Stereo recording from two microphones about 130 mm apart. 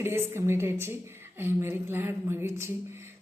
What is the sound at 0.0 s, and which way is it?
Speech, 20° right (ahead or behind).